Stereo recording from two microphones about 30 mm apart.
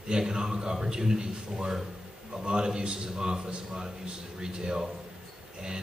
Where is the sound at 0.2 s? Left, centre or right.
Right.